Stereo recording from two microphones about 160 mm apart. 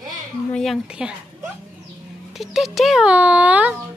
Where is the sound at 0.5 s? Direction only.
Centre (ahead or behind).